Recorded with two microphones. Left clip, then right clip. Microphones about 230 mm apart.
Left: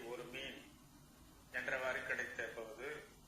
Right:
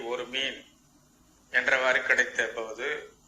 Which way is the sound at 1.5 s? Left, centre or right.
Right.